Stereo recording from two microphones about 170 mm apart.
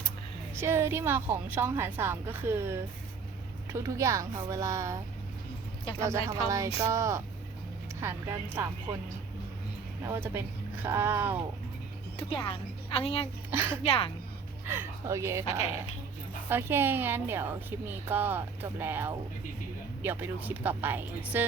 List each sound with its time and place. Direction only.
0.5 s a woman's voice: 15° right (ahead or behind)
6.0 s a woman's voice: 15° right (ahead or behind)
10.1 s a woman's voice: 15° right (ahead or behind)
12.1 s speech: 30° left (ahead or behind)
13.5 s a woman's voice: 15° right (ahead or behind)
13.8 s a woman's voice: 35° left (ahead or behind)
14.7 s a woman's voice: 15° right (ahead or behind)